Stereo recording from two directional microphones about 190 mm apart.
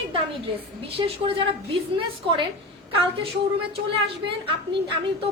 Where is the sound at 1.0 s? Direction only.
25° right (ahead or behind).